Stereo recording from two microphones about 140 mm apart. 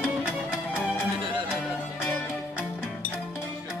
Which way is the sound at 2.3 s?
5° right (ahead or behind).